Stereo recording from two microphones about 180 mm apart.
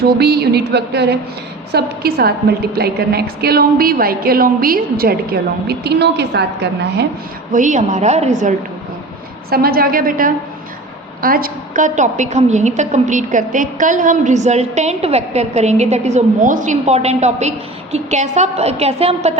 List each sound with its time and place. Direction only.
0.0 s a woman's voice: 60° right (ahead or behind)
7.5 s a woman's voice: 45° right (ahead or behind)
9.5 s a woman's voice: 55° right (ahead or behind); by 19.3 s 35° right (ahead or behind)